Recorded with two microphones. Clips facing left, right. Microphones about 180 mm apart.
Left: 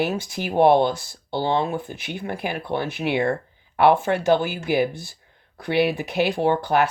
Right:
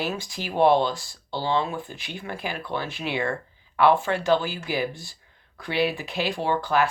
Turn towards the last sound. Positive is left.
turn(degrees=60)  # may be behind; listen again after turning